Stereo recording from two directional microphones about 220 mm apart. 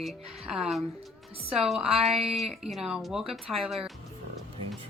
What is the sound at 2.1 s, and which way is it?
Speech, 25° right (ahead or behind).